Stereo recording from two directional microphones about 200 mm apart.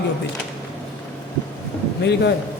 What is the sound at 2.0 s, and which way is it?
Speech, 60° left (ahead or behind).